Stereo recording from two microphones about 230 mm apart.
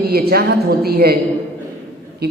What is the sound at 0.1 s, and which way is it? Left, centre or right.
A woman's voice, right.